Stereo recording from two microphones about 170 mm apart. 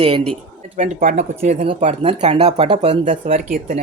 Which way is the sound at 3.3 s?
55° right (ahead or behind).